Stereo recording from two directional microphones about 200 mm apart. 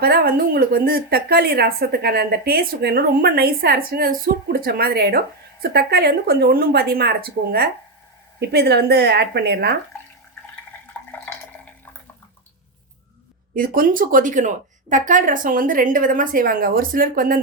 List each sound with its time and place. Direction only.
0.0 s a woman's voice: 50° right (ahead or behind)
13.5 s a woman's voice: 45° right (ahead or behind)